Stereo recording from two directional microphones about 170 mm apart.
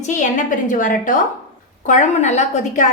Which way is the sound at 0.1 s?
45° left (ahead or behind).